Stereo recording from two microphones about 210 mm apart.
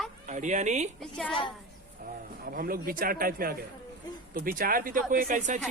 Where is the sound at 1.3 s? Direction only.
25° left (ahead or behind).